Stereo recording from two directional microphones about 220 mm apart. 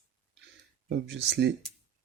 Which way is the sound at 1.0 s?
50° right (ahead or behind).